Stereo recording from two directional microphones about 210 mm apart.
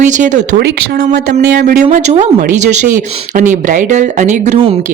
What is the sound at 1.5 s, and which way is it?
Speech, 40° right (ahead or behind).